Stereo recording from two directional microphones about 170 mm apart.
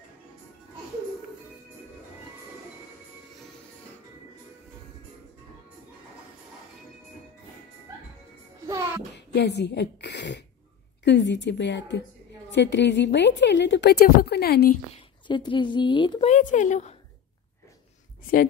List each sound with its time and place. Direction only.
8.6 s music: 20° right (ahead or behind)
9.1 s a woman's voice: 85° left
15.2 s a woman's voice: 30° left (ahead or behind)
16.3 s speech: 45° left (ahead or behind)